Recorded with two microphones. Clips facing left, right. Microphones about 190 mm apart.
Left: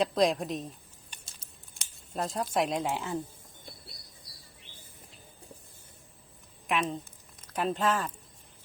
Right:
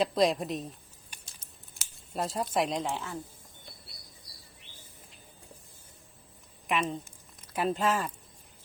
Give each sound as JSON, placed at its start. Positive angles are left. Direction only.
{"t": 0.0, "sound": "a woman's voice", "side_deg": 0}
{"t": 1.7, "sound": "speech", "side_deg": 0}
{"t": 6.7, "sound": "a woman's voice", "side_deg": 0}